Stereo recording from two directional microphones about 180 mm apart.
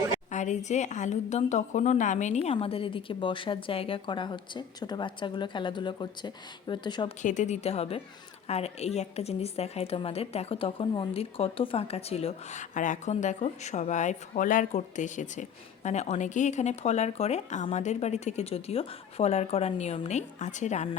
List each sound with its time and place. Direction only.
0.3 s speech: 40° left (ahead or behind); by 7.1 s 25° left (ahead or behind)
7.2 s a woman's voice: 40° left (ahead or behind)